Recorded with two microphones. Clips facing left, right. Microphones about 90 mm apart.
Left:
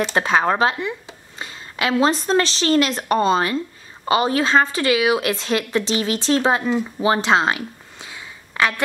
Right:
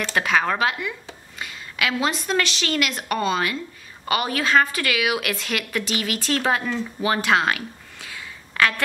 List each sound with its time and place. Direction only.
0.1 s a woman's voice: 30° left (ahead or behind)